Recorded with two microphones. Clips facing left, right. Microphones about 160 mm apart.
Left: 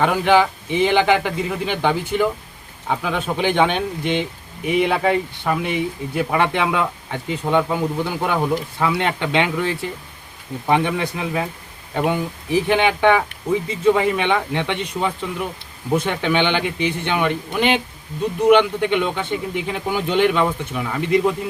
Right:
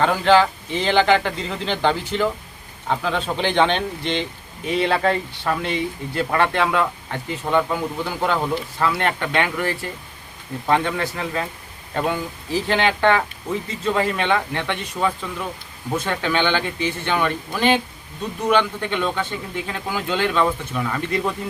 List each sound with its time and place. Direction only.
0.0 s speech: 15° left (ahead or behind)